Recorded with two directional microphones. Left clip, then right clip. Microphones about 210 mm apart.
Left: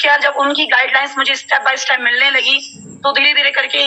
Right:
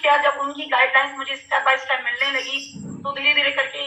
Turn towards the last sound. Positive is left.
turn(degrees=45)  # may be behind; listen again after turning